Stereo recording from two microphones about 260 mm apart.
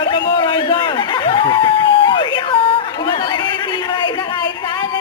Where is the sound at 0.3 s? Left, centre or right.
Centre.